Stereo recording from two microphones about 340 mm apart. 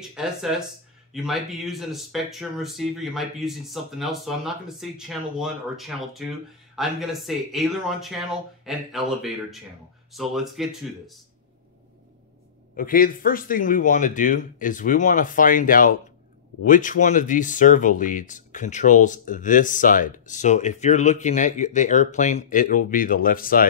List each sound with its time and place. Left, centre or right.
0.0 s speech: centre
12.7 s speech: left